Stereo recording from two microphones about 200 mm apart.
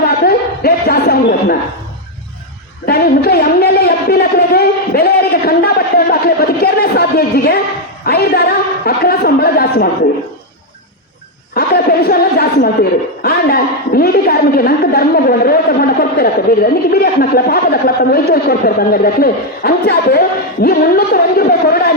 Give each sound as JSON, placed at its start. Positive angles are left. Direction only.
{"t": 0.0, "sound": "a sound", "side_deg": 50}
{"t": 2.8, "sound": "a woman's voice", "side_deg": 50}
{"t": 11.5, "sound": "a woman's voice", "side_deg": 50}